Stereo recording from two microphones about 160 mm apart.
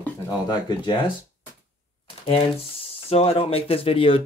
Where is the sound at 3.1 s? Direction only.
35° left (ahead or behind).